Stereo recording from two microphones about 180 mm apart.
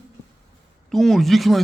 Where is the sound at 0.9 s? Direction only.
Centre (ahead or behind).